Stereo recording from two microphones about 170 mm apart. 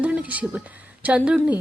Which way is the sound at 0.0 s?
10° right (ahead or behind).